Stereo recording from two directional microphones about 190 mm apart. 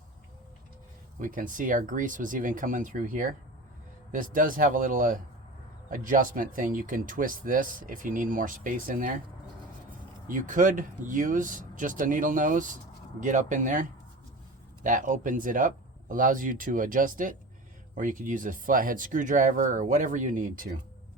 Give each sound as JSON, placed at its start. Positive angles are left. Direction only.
{"t": 1.2, "sound": "speech", "side_deg": -45}
{"t": 10.2, "sound": "speech", "side_deg": -45}
{"t": 14.8, "sound": "speech", "side_deg": -45}